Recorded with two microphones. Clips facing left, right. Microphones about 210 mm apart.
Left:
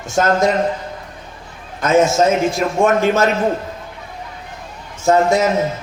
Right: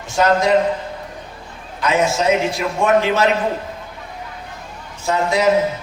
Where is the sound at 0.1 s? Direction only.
45° left (ahead or behind).